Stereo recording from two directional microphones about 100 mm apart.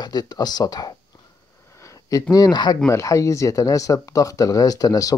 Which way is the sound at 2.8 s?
30° left (ahead or behind).